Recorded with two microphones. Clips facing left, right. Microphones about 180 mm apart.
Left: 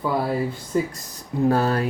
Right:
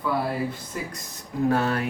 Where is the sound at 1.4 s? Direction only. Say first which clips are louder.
Left 3 dB; 35° left (ahead or behind).